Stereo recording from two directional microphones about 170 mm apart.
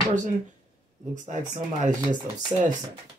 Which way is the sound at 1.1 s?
45° right (ahead or behind).